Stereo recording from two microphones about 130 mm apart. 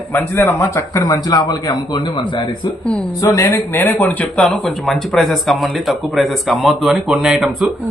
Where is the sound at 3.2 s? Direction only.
25° left (ahead or behind).